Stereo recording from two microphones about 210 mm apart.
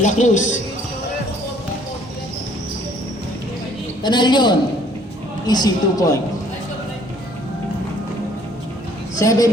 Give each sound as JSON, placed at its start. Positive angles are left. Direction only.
{"t": 0.0, "sound": "a man's voice", "side_deg": 35}
{"t": 4.0, "sound": "a man's voice", "side_deg": 20}
{"t": 9.1, "sound": "speech", "side_deg": 15}